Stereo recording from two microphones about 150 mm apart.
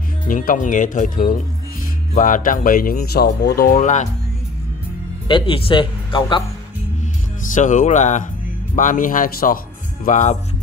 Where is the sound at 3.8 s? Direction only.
55° left (ahead or behind).